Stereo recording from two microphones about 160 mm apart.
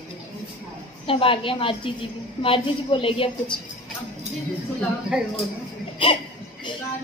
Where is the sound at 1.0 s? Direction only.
35° left (ahead or behind).